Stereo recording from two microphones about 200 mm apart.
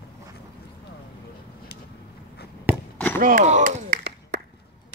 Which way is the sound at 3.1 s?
40° right (ahead or behind).